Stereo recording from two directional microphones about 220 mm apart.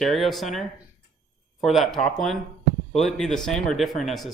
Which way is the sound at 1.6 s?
Centre (ahead or behind).